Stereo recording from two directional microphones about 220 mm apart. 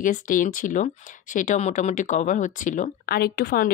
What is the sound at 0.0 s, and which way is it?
Speech, 35° left (ahead or behind).